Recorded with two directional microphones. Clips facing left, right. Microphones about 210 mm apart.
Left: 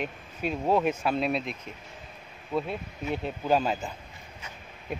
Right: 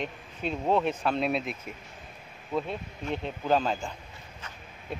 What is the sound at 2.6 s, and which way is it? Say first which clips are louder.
Speech: left 1 dB; 5° left (ahead or behind).